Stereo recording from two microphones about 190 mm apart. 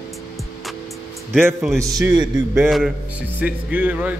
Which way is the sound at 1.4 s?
10° right (ahead or behind).